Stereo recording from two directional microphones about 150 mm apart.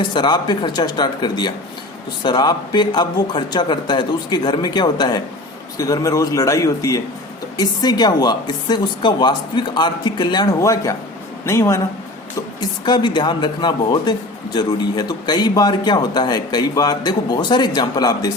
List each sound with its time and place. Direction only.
0.0 s speech: 30° left (ahead or behind)
12.5 s speech: 30° left (ahead or behind)